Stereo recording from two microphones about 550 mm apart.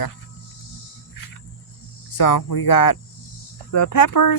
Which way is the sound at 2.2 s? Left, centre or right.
Left.